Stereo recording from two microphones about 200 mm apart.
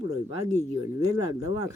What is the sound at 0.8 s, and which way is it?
Speech, 20° right (ahead or behind).